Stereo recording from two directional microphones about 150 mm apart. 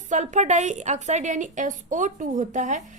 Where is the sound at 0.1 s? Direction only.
50° right (ahead or behind).